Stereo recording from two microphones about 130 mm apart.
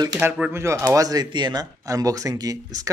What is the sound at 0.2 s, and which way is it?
Speech, 10° right (ahead or behind).